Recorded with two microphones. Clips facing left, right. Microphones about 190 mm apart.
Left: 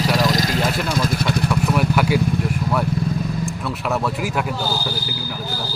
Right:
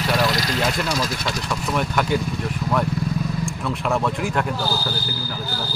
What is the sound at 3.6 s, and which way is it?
Speech, 5° left (ahead or behind).